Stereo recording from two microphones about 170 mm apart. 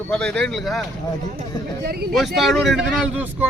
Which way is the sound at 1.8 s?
65° right (ahead or behind).